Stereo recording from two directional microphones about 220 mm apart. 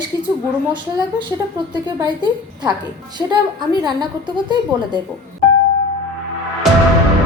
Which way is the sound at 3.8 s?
20° right (ahead or behind).